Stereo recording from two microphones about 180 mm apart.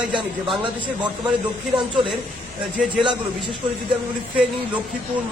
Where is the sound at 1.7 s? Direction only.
25° right (ahead or behind).